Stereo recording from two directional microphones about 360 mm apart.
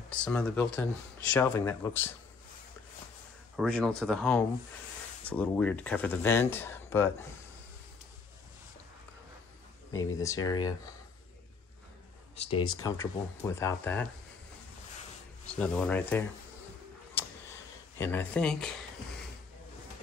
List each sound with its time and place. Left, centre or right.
0.1 s speech: centre
3.5 s speech: centre
9.9 s speech: centre
12.4 s speech: centre
15.5 s speech: centre
17.2 s a sound: centre
17.9 s speech: centre